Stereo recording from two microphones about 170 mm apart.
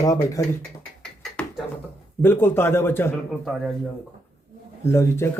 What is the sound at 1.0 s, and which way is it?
Beatboxing, 5° left (ahead or behind).